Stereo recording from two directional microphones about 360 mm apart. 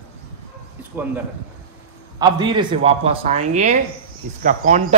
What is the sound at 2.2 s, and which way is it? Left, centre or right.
Speech, centre.